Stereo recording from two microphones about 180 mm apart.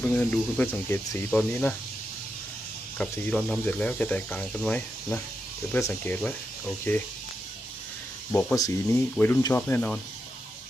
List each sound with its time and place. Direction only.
0.0 s speech: 10° left (ahead or behind)
3.0 s speech: 5° left (ahead or behind)
8.3 s speech: 5° left (ahead or behind)
8.5 s speech: 20° left (ahead or behind)